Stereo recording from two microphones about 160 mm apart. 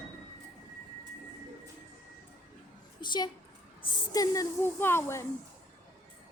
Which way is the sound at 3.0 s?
30° left (ahead or behind).